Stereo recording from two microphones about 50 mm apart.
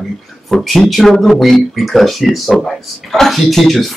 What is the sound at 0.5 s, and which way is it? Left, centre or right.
Speech, centre.